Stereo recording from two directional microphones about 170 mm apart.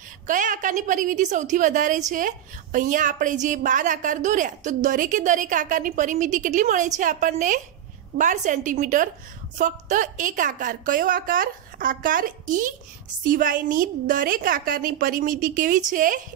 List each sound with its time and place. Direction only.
0.3 s a woman's voice: 50° right (ahead or behind)